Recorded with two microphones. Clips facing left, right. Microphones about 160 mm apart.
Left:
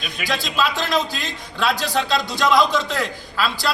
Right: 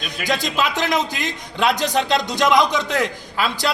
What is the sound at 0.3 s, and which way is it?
Speech, 20° right (ahead or behind).